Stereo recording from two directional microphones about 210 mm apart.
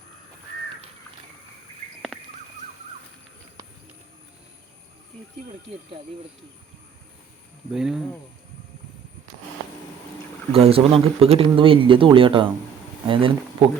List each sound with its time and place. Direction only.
7.7 s speech: 5° right (ahead or behind)
10.5 s speech: 25° right (ahead or behind)